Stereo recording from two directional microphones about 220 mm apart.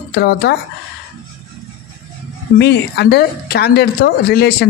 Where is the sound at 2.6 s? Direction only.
50° left (ahead or behind).